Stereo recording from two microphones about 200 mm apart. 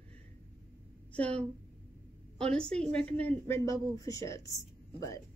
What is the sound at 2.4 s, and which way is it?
A woman's voice, 5° left (ahead or behind).